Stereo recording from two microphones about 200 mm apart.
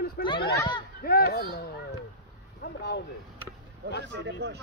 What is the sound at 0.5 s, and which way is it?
Speech, 20° left (ahead or behind).